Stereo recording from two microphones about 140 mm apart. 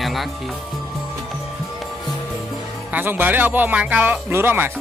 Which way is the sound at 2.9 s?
15° right (ahead or behind).